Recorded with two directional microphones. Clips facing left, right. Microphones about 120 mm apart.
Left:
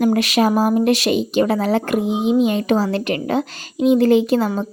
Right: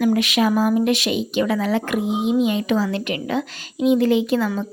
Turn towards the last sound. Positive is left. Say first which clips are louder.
# left 3 dB
turn(degrees=35)  # may be behind; listen again after turning